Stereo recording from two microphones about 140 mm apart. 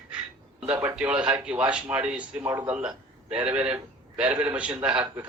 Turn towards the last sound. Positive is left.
turn(degrees=-10)  # may be behind; listen again after turning